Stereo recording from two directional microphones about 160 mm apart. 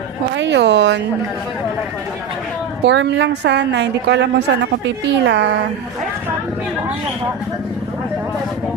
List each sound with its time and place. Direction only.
0.5 s a woman's voice: 90° right
2.8 s a woman's voice: 90° right